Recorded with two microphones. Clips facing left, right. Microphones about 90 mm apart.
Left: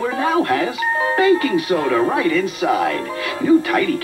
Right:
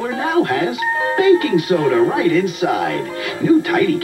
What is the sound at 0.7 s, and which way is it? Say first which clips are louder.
Speech: even; 40° left (ahead or behind).